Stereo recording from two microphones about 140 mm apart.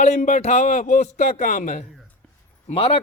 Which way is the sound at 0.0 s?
60° left (ahead or behind).